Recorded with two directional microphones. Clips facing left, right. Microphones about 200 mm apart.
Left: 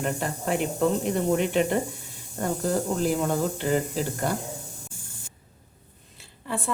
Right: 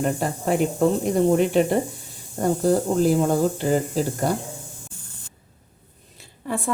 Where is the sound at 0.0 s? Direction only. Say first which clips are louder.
Right 5 dB; 35° right (ahead or behind).